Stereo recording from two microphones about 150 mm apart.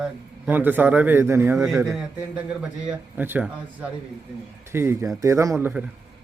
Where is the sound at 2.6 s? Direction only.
10° right (ahead or behind).